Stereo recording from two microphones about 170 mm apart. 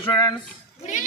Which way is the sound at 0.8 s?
50° left (ahead or behind).